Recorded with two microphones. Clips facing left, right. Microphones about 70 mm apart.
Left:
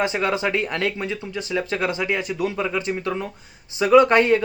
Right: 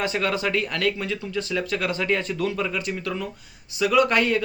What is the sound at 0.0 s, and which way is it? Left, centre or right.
A man's voice, left.